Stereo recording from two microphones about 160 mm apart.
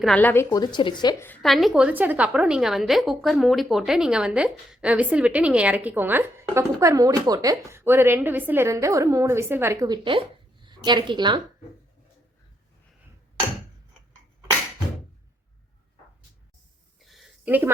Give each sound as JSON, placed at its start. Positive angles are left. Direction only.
{"t": 0.0, "sound": "speech", "side_deg": 10}
{"t": 1.4, "sound": "a woman's voice", "side_deg": 0}
{"t": 17.0, "sound": "a sound", "side_deg": 0}
{"t": 17.4, "sound": "speech", "side_deg": -10}